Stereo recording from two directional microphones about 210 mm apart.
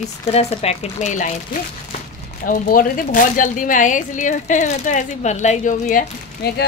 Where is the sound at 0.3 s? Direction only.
30° left (ahead or behind).